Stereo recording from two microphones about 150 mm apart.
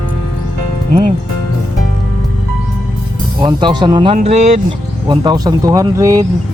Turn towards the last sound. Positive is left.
turn(degrees=-20)  # may be behind; listen again after turning